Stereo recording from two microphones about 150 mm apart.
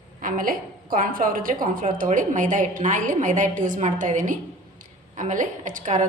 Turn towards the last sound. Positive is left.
turn(degrees=-60)  # may be behind; listen again after turning